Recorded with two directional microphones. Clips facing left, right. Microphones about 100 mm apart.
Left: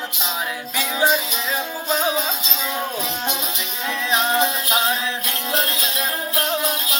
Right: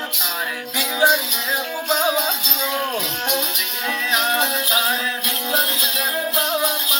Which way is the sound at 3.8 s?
25° left (ahead or behind).